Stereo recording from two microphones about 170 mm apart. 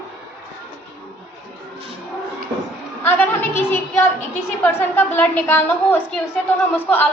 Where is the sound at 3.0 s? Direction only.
15° left (ahead or behind).